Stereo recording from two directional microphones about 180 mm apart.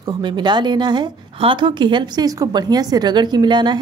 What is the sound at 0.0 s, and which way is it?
Speech, 25° right (ahead or behind).